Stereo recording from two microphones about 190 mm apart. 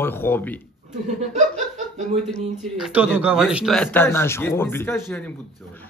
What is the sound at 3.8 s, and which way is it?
A man's voice, 10° left (ahead or behind).